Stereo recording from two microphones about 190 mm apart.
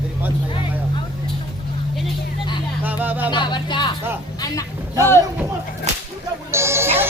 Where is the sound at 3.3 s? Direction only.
25° left (ahead or behind).